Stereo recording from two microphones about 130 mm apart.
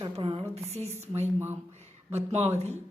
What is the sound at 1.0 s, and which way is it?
A woman's voice, 55° right (ahead or behind).